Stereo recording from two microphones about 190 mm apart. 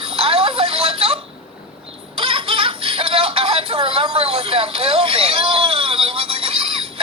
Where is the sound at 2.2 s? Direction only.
30° right (ahead or behind).